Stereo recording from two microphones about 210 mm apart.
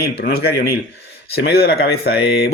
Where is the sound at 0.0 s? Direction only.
50° left (ahead or behind).